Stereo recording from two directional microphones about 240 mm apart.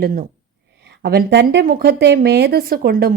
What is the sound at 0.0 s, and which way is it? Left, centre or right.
A woman's voice, right.